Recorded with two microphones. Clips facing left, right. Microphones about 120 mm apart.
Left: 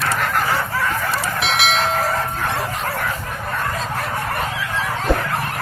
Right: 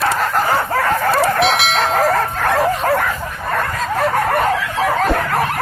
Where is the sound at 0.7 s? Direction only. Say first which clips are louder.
Right 6 dB; 60° right (ahead or behind).